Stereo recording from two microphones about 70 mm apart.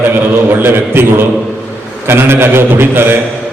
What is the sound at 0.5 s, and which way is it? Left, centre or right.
A man's voice, right.